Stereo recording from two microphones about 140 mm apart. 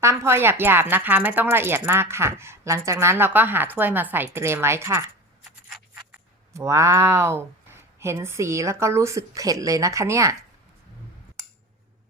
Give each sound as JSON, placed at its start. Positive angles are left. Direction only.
{"t": 0.0, "sound": "speech", "side_deg": -20}
{"t": 5.6, "sound": "a sound", "side_deg": -10}
{"t": 6.5, "sound": "speech", "side_deg": -20}